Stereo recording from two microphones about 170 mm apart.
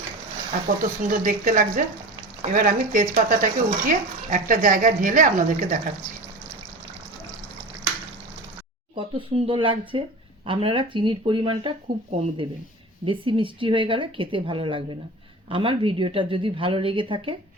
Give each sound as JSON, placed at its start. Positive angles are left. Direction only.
{"t": 0.8, "sound": "speech", "side_deg": -50}
{"t": 9.0, "sound": "speech", "side_deg": -30}